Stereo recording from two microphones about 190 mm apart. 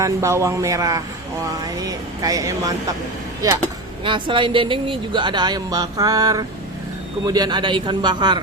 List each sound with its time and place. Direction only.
0.0 s a man's voice: 15° right (ahead or behind)
4.0 s speech: 25° right (ahead or behind)